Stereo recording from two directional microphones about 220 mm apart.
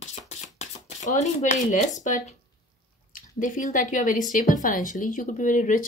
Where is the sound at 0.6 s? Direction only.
30° left (ahead or behind).